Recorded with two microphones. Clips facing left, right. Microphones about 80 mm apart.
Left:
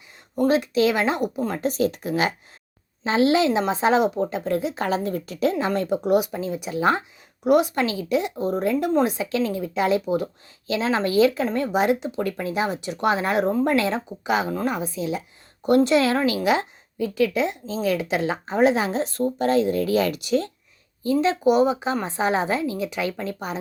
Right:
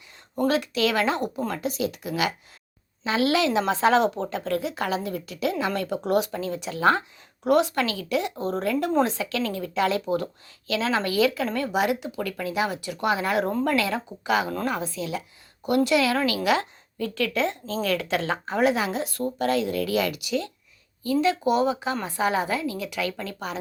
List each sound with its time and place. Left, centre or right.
0.3 s speech: left
1.5 s speech: left
6.0 s speech: centre
15.6 s speech: left
21.0 s speech: left